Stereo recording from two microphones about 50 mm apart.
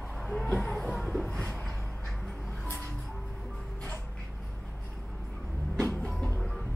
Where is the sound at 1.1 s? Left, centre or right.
Centre.